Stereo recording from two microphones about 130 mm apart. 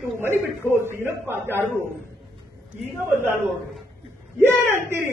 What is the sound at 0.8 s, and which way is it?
Speech, 20° right (ahead or behind).